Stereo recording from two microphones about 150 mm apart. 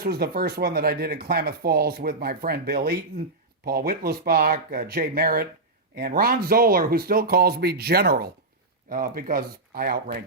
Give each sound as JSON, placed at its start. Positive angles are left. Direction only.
{"t": 0.0, "sound": "speech", "side_deg": -90}
{"t": 8.9, "sound": "speech", "side_deg": -70}